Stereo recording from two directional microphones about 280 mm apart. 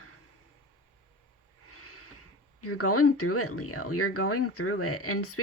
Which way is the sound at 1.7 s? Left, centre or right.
Left.